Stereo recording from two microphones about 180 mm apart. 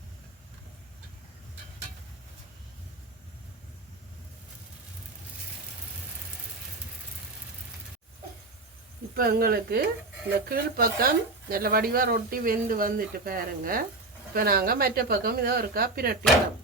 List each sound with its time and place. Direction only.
9.1 s a woman's voice: 55° right (ahead or behind)